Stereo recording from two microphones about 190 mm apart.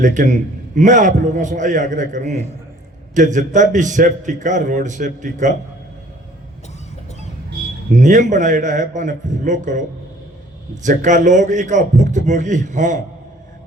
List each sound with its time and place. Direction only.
0.0 s a man's voice: 40° right (ahead or behind)
7.9 s a man's voice: 40° right (ahead or behind)
10.8 s a man's voice: 40° right (ahead or behind)